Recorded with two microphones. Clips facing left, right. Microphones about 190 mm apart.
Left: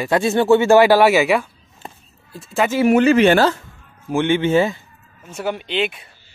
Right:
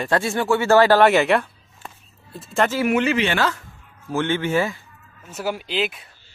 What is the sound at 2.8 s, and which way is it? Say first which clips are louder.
Speech: left 7 dB; 40° left (ahead or behind).